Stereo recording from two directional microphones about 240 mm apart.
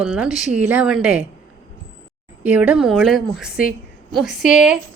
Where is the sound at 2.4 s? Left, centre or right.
Centre.